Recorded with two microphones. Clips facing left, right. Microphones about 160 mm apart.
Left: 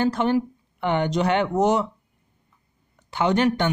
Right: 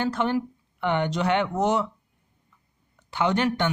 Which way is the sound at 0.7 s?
40° left (ahead or behind).